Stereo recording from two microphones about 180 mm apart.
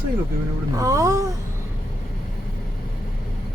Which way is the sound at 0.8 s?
20° right (ahead or behind).